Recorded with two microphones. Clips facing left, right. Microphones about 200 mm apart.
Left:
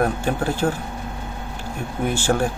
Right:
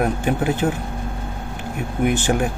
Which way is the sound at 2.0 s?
15° right (ahead or behind).